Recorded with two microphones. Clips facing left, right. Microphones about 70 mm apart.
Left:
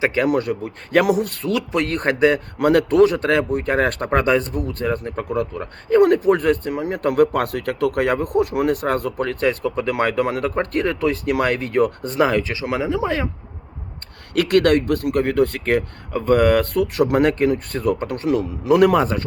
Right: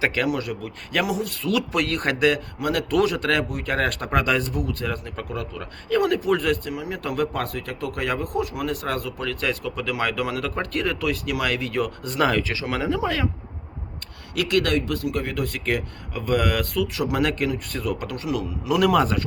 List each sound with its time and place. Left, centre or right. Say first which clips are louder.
0.0 s speech: left 4 dB; left
0.3 s speech: left 6 dB; left
1.0 s speech: left 7 dB; left
1.5 s speech: even; left
2.6 s speech: left 9 dB; left
2.9 s speech: left 6 dB; left
12.1 s speech: left 1 dB; left
14.3 s speech: left 6 dB; left